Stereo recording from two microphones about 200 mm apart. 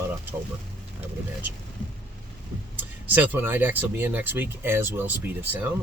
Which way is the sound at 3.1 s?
10° right (ahead or behind).